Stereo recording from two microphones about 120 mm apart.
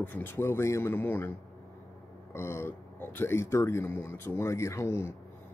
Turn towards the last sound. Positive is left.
turn(degrees=25)  # may be behind; listen again after turning